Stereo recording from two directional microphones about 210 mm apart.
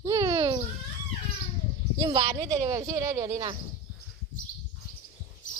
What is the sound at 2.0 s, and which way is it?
Speech, 15° right (ahead or behind).